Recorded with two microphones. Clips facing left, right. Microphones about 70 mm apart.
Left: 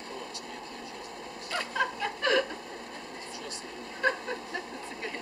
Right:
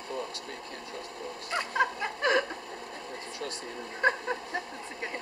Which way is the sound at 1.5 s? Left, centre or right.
Right.